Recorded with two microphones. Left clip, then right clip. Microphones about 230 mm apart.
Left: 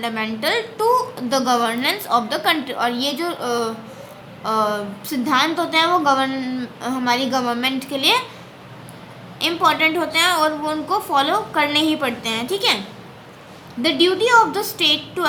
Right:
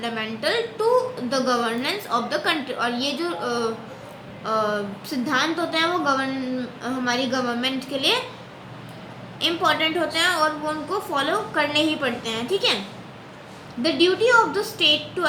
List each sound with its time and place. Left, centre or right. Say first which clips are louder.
0.0 s a woman's voice: left 3 dB; left
9.4 s a woman's voice: left 4 dB; left
13.8 s a woman's voice: left 2 dB; left